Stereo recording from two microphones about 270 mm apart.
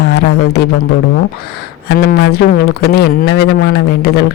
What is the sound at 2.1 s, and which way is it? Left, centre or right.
Speech, left.